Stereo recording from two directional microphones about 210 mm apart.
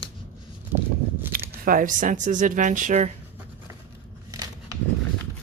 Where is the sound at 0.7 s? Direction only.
10° right (ahead or behind).